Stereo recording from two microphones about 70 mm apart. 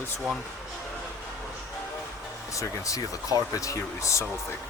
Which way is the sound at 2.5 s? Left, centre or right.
Left.